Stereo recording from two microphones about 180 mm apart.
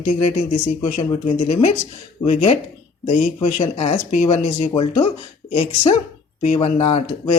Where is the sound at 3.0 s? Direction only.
35° left (ahead or behind).